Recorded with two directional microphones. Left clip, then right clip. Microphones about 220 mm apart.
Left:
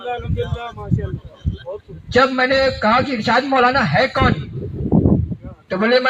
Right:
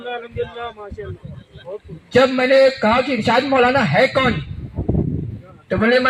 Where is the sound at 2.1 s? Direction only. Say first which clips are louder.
Right 1 dB; 50° right (ahead or behind).